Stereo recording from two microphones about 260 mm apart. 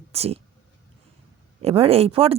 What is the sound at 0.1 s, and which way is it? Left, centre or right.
Speech, right.